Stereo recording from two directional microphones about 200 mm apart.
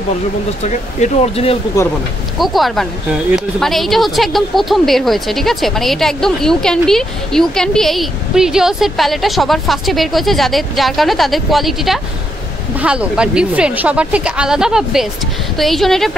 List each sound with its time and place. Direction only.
0.7 s speech: 35° left (ahead or behind)
2.3 s speech: centre (ahead or behind)